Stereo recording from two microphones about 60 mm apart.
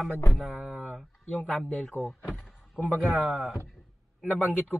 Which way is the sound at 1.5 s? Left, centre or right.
Centre.